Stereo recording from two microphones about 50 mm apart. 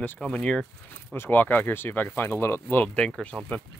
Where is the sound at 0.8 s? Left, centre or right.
Left.